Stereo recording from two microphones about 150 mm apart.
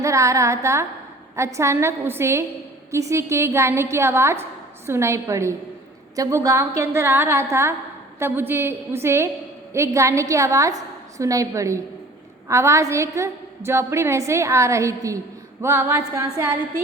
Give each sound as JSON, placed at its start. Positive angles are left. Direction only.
{"t": 0.0, "sound": "a woman's voice", "side_deg": -20}